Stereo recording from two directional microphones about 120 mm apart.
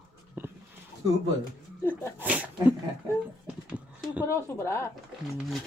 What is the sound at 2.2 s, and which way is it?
Speech, 15° right (ahead or behind).